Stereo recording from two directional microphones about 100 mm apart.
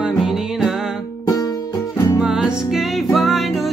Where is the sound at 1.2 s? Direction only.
35° left (ahead or behind).